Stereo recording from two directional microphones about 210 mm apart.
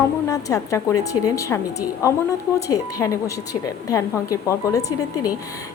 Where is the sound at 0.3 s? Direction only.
15° left (ahead or behind).